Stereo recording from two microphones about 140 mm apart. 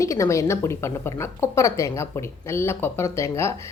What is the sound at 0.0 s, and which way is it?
Speech, 20° left (ahead or behind).